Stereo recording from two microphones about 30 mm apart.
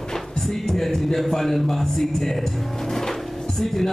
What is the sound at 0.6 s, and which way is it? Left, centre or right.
A man's voice, centre.